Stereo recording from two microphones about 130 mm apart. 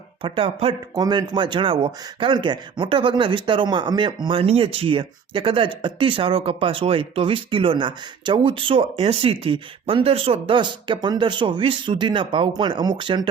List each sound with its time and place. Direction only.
0.2 s speech: 40° right (ahead or behind)
0.9 s speech: 30° right (ahead or behind)